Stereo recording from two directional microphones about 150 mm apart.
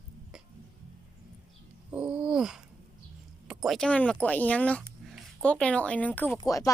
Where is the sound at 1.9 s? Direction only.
5° right (ahead or behind).